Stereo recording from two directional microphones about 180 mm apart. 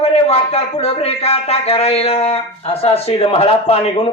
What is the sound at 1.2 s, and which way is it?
Speech, 35° left (ahead or behind).